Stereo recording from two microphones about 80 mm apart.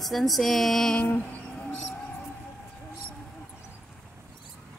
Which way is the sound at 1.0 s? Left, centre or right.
Centre.